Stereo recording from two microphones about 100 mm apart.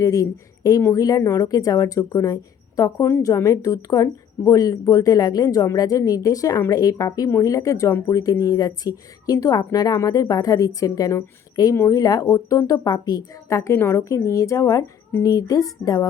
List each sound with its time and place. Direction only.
0.0 s a woman's voice: 35° left (ahead or behind)
3.1 s speech: 25° left (ahead or behind)
3.3 s speech: 35° left (ahead or behind)